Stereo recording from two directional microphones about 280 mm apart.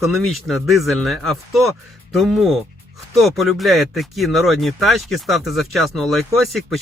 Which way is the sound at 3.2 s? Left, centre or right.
Centre.